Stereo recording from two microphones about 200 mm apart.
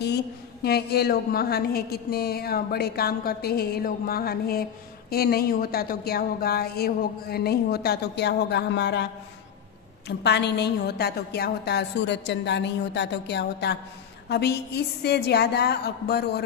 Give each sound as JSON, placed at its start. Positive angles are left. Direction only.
{"t": 0.0, "sound": "a woman's voice", "side_deg": 55}
{"t": 10.0, "sound": "a woman's voice", "side_deg": 55}